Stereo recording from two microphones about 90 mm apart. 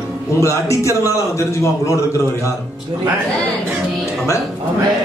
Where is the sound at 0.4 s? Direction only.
35° left (ahead or behind).